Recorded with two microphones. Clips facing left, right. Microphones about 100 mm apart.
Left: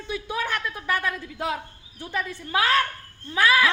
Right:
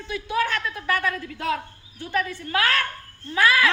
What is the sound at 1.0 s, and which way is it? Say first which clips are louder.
A woman's voice: right 1 dB; 15° left (ahead or behind).